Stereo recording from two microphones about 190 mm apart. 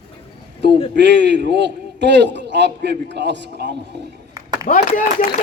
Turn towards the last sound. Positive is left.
turn(degrees=45)  # may be behind; listen again after turning